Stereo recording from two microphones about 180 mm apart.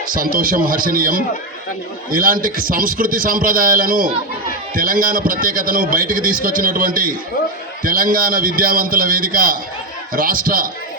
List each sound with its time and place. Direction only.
0.1 s a man's voice: 50° right (ahead or behind)